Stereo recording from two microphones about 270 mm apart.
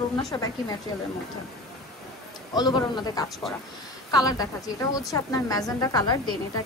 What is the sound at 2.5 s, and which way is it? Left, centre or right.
A woman's voice, centre.